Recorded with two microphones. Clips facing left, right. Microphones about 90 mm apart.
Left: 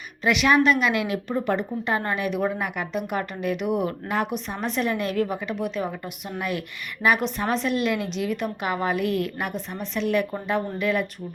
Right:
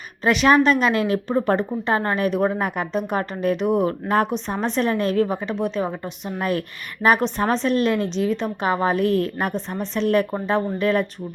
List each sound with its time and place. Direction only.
0.3 s a woman's voice: 35° right (ahead or behind)